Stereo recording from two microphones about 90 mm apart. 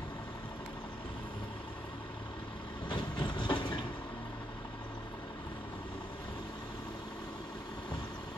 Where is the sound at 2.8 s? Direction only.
55° left (ahead or behind).